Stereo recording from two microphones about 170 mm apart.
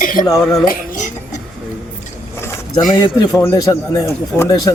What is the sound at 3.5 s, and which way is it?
Speech, 20° left (ahead or behind).